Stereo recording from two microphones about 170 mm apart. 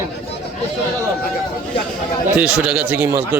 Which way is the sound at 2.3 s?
5° right (ahead or behind).